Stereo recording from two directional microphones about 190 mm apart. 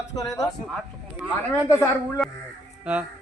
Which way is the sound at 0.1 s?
15° left (ahead or behind).